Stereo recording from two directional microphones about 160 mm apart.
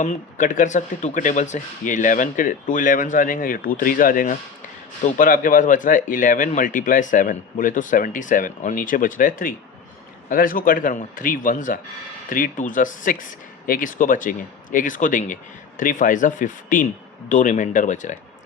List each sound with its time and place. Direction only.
0.0 s speech: 50° left (ahead or behind)